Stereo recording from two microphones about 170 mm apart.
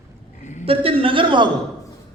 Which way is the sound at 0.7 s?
30° right (ahead or behind).